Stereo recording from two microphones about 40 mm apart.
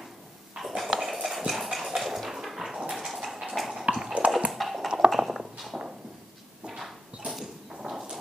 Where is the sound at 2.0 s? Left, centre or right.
Centre.